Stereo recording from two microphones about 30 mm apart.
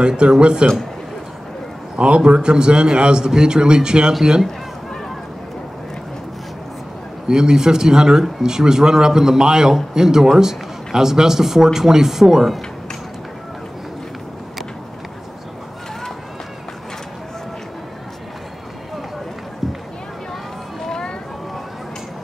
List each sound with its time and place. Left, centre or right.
0.4 s a man's voice: right
2.0 s a man's voice: right
7.2 s a man's voice: right
19.6 s run: centre